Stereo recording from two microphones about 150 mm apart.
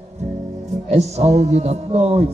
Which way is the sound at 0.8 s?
45° right (ahead or behind).